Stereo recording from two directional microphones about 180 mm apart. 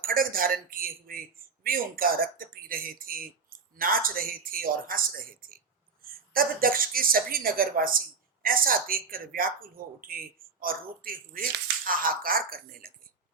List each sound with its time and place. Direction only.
0.0 s speech: 50° right (ahead or behind)